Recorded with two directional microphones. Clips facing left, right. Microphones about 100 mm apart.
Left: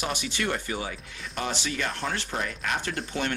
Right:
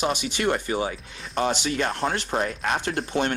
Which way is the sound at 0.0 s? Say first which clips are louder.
Right 5 dB; 20° right (ahead or behind).